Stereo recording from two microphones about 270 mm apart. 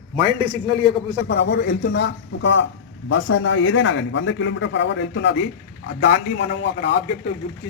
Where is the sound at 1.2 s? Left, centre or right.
Left.